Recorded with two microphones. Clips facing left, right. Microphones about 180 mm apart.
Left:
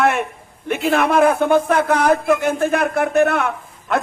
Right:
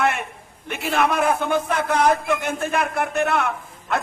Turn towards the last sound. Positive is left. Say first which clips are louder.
# left 4 dB
turn(degrees=55)  # may be behind; listen again after turning